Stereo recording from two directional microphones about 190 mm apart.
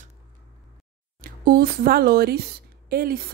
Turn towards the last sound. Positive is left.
turn(degrees=-50)  # may be behind; listen again after turning